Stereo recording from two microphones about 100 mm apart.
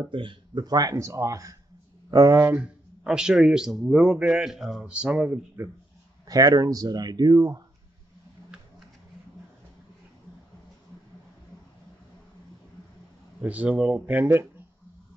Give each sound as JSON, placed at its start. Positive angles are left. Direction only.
{"t": 0.1, "sound": "speech", "side_deg": -55}
{"t": 2.5, "sound": "a man's voice", "side_deg": -10}
{"t": 6.2, "sound": "speech", "side_deg": -40}
{"t": 13.4, "sound": "a man's voice", "side_deg": -15}